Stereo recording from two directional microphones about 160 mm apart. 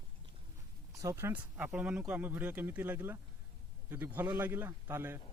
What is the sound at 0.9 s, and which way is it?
A man's voice, 15° right (ahead or behind).